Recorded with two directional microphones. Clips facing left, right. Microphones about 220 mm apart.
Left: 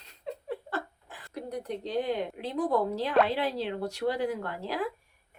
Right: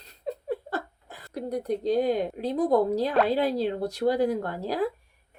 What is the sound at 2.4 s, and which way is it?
A woman's voice, 40° right (ahead or behind).